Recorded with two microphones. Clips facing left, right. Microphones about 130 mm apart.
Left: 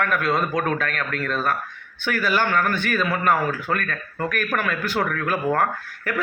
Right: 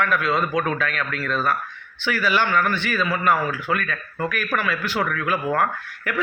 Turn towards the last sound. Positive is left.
turn(degrees=40)  # may be behind; listen again after turning